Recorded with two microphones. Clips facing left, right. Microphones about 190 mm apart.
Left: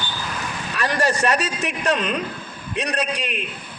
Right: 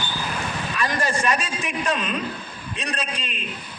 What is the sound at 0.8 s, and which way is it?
A man's voice, 70° left (ahead or behind).